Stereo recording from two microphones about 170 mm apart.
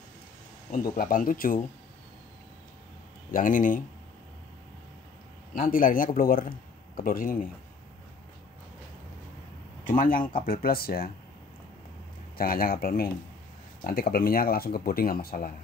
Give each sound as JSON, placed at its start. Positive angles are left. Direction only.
{"t": 0.7, "sound": "speech", "side_deg": 60}
{"t": 3.3, "sound": "speech", "side_deg": 50}
{"t": 5.5, "sound": "speech", "side_deg": 55}
{"t": 9.9, "sound": "speech", "side_deg": 55}
{"t": 12.4, "sound": "speech", "side_deg": 60}